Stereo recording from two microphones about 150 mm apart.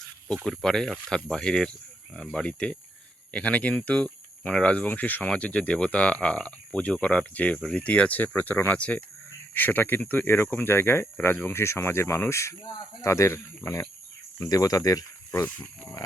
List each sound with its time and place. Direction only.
0.4 s speech: 5° left (ahead or behind)